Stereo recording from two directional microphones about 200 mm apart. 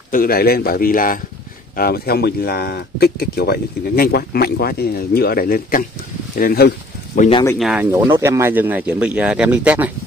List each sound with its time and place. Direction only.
0.1 s speech: 45° left (ahead or behind)
7.2 s speech: 30° left (ahead or behind)
7.5 s speech: 5° right (ahead or behind)